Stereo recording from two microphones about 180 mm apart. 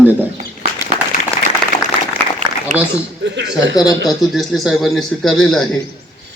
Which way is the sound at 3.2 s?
75° right (ahead or behind).